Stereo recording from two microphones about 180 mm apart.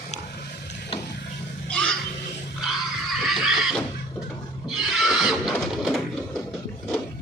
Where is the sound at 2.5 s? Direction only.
Centre (ahead or behind).